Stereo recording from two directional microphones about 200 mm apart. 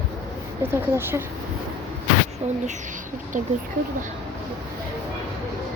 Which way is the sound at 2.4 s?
35° right (ahead or behind).